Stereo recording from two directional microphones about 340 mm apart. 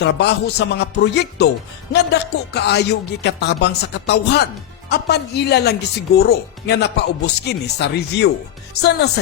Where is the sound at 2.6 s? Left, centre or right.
Left.